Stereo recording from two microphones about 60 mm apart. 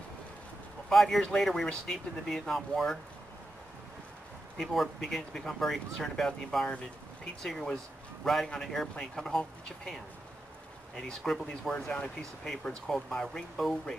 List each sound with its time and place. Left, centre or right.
0.8 s speech: centre
4.6 s a man's voice: centre
11.0 s speech: centre
11.7 s speech: centre
12.4 s speech: centre